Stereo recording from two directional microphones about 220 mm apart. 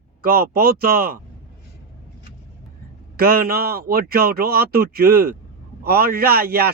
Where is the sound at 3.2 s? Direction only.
45° right (ahead or behind).